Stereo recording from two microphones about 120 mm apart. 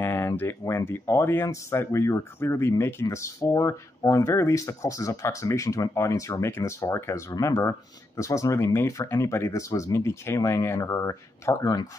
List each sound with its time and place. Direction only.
0.0 s speech: 20° left (ahead or behind)